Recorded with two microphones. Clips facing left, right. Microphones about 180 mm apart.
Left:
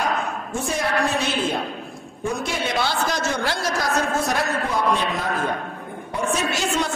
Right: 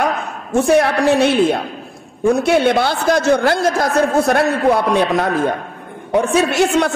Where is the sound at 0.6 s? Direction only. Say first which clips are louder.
Right 11 dB; 70° right (ahead or behind).